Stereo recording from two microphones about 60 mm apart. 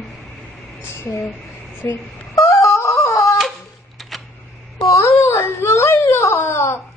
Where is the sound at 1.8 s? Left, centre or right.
Left.